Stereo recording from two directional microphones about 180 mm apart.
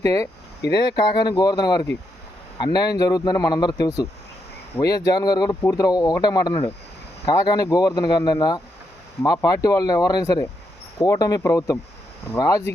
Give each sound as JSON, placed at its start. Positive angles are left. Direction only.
{"t": 0.0, "sound": "speech", "side_deg": 20}